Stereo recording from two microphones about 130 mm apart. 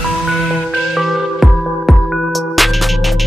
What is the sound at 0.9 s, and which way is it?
Music, centre (ahead or behind).